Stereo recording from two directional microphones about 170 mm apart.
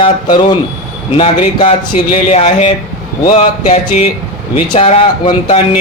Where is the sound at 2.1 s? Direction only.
40° left (ahead or behind).